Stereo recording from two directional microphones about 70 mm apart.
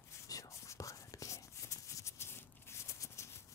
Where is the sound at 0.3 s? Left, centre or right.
Left.